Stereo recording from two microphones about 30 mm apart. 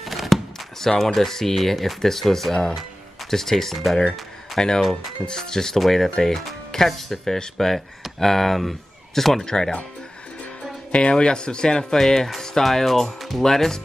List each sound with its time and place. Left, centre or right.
0.0 s a sound: centre
0.7 s speech: centre
4.6 s speech: left; by 9.4 s centre
9.4 s speech: left
10.9 s speech: left; by 12.3 s centre
12.6 s speech: centre